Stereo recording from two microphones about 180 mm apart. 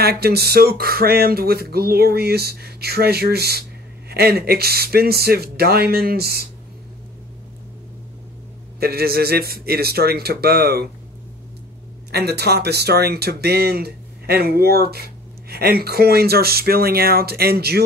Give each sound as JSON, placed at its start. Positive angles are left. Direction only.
{"t": 0.0, "sound": "speech", "side_deg": -60}
{"t": 8.7, "sound": "speech", "side_deg": -60}
{"t": 12.1, "sound": "speech", "side_deg": -65}